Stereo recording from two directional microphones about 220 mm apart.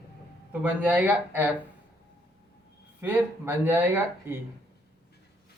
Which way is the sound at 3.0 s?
10° right (ahead or behind).